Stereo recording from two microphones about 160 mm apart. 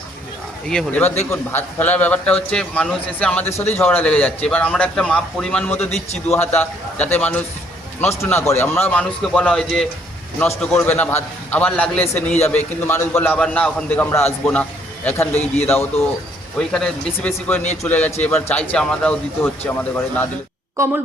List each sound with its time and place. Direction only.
0.7 s a man's voice: 5° left (ahead or behind)
20.8 s a woman's voice: 20° right (ahead or behind)